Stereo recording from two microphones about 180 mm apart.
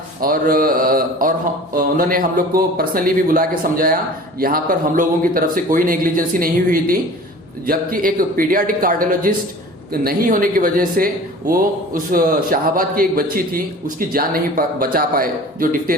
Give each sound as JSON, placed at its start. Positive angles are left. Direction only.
{"t": 0.2, "sound": "speech", "side_deg": -55}